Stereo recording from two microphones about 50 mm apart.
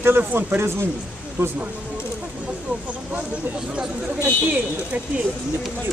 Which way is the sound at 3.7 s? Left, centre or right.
Right.